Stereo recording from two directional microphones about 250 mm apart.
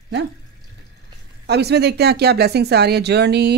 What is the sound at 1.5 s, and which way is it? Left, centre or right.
Speech, right.